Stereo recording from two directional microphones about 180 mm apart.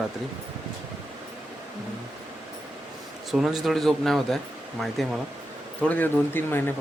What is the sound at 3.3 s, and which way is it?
A man's voice, centre (ahead or behind).